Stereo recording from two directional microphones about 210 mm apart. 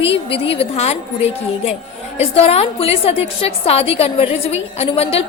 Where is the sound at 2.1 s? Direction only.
30° left (ahead or behind).